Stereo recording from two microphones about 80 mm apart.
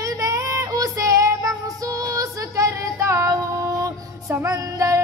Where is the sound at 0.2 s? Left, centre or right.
Right.